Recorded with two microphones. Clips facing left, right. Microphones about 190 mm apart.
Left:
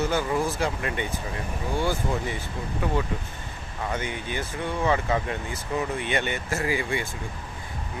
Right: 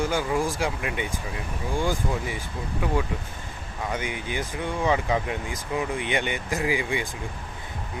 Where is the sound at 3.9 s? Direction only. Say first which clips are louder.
Right 1 dB; 10° right (ahead or behind).